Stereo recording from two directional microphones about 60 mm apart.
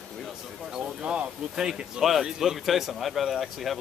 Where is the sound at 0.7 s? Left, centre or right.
Centre.